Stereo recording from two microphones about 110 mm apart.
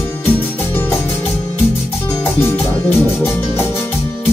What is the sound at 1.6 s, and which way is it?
Music, 5° right (ahead or behind).